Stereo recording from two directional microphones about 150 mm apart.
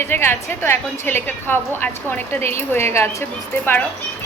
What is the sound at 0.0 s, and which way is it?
A woman's voice, 15° left (ahead or behind).